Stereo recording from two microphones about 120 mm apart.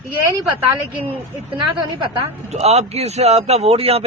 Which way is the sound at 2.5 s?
60° right (ahead or behind).